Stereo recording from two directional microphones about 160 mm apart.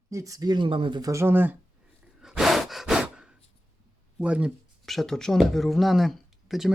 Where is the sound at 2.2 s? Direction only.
Centre (ahead or behind).